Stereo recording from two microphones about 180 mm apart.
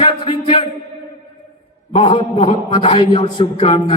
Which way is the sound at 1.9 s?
35° left (ahead or behind).